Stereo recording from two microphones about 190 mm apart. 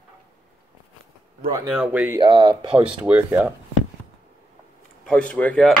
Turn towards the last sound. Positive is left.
turn(degrees=5)  # may be behind; listen again after turning